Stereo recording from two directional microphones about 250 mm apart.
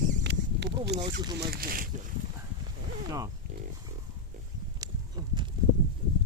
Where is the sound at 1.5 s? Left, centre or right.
Right.